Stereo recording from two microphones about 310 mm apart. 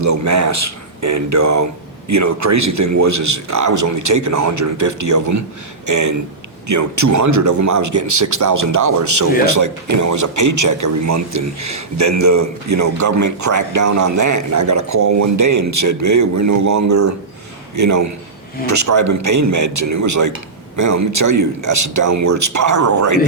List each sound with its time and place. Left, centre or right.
0.0 s speech: right